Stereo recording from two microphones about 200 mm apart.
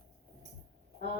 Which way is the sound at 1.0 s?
60° right (ahead or behind).